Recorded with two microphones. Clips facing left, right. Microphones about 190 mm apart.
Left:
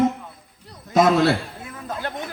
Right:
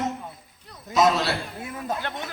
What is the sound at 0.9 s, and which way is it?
Speech, 55° left (ahead or behind).